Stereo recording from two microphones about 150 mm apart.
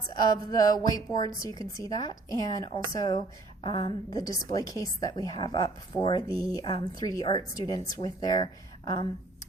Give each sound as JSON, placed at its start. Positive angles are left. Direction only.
{"t": 0.1, "sound": "speech", "side_deg": 25}